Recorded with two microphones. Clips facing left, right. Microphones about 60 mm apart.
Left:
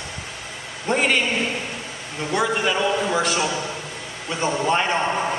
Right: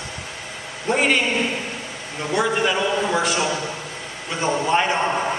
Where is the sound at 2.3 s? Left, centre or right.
Centre.